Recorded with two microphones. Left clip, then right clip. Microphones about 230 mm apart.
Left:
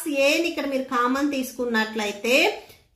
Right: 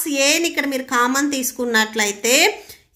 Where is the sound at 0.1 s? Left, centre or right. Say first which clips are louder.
Right 3 dB; right.